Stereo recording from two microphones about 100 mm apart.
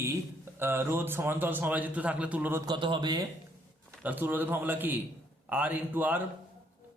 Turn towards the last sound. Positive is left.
turn(degrees=-20)  # may be behind; listen again after turning